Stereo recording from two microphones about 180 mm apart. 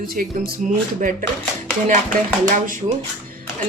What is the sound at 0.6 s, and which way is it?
Chopping, 45° right (ahead or behind).